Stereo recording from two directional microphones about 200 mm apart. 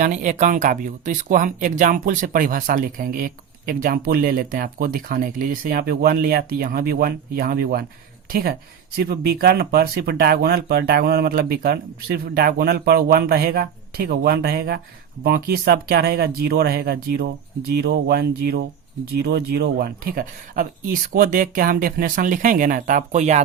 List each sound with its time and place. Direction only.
0.0 s speech: 35° right (ahead or behind)